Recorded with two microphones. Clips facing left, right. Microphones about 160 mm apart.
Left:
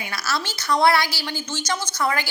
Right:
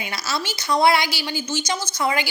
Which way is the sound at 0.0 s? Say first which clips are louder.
Even; 20° right (ahead or behind).